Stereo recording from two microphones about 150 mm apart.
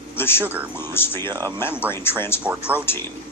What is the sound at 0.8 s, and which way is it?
Speech, 15° left (ahead or behind).